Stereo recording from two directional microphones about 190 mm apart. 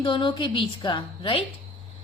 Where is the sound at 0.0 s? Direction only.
25° left (ahead or behind).